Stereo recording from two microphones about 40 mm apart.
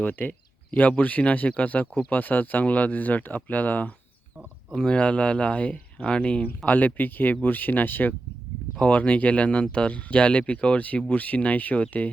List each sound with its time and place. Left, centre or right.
0.0 s speech: left
4.9 s speech: left
6.7 s speech: left
8.8 s speech: left